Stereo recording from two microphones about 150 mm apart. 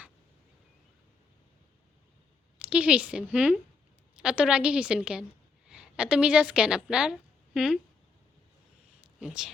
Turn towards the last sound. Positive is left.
turn(degrees=-5)  # may be behind; listen again after turning